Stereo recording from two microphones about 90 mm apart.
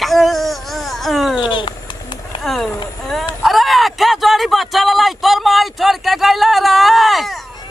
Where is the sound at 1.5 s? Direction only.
65° left (ahead or behind).